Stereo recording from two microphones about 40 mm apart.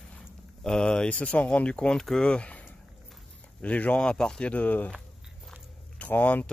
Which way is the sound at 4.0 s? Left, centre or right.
Centre.